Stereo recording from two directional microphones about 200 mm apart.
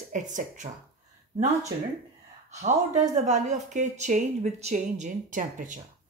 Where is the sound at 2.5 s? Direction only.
35° right (ahead or behind).